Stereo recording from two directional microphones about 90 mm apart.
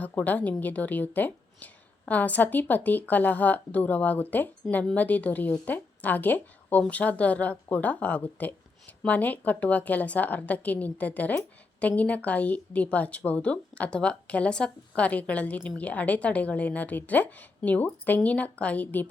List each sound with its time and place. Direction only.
0.0 s a woman's voice: 15° left (ahead or behind)